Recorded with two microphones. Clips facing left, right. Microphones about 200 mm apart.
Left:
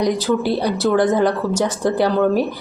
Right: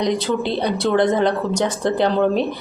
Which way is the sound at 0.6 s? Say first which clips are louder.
Left 1 dB; 10° left (ahead or behind).